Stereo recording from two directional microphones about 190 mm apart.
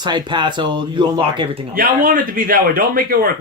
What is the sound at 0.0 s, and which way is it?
Speech, 25° right (ahead or behind).